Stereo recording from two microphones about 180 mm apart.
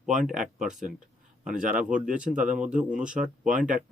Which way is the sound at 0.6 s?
45° right (ahead or behind).